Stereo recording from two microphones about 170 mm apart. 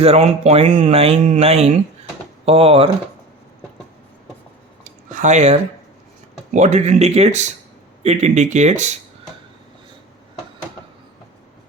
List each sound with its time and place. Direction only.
0.0 s speech: 35° right (ahead or behind)
4.8 s a sound: 45° right (ahead or behind)
6.5 s speech: 40° right (ahead or behind)